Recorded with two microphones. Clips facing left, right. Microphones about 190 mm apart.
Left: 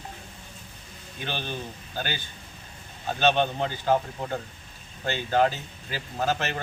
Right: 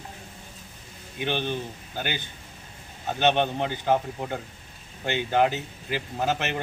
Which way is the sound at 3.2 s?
15° right (ahead or behind).